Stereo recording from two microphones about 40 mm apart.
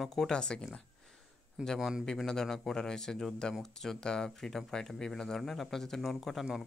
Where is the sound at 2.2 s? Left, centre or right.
Centre.